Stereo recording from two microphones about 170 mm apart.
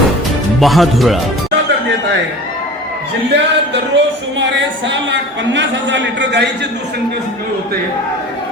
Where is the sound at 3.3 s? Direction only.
85° right.